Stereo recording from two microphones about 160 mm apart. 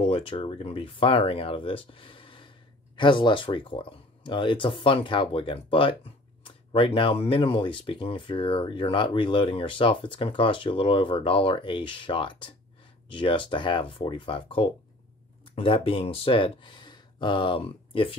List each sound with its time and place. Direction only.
0.0 s speech: 35° left (ahead or behind)